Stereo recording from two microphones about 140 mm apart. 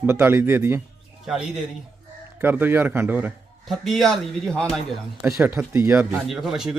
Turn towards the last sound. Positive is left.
turn(degrees=-5)  # may be behind; listen again after turning